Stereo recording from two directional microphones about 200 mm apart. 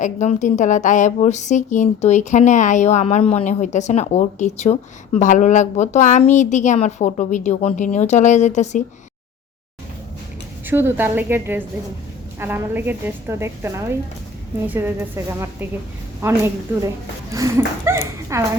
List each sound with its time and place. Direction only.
0.0 s a woman's voice: 35° left (ahead or behind)
10.7 s a woman's voice: 10° right (ahead or behind)